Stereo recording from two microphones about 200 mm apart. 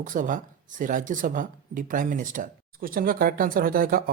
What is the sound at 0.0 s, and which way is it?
Speech, 40° right (ahead or behind).